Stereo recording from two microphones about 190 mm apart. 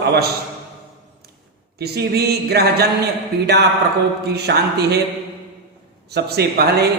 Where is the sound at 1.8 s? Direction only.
60° right (ahead or behind).